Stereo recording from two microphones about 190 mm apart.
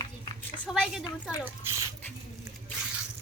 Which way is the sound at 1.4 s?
15° right (ahead or behind).